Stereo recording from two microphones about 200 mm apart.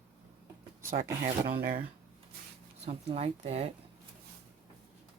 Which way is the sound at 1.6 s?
50° right (ahead or behind).